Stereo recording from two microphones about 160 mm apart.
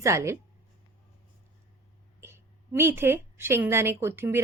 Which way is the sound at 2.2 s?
15° right (ahead or behind).